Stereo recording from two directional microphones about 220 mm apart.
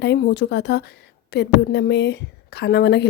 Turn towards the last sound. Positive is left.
turn(degrees=50)  # may be behind; listen again after turning